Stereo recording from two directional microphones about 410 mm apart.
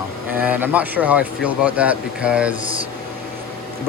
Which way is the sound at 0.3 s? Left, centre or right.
Centre.